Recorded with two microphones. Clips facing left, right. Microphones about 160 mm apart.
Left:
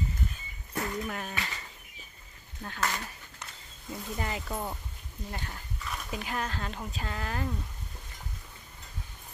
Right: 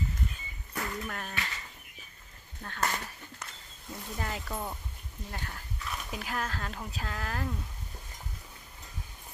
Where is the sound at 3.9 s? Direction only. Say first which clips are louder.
Left 2 dB; 5° left (ahead or behind).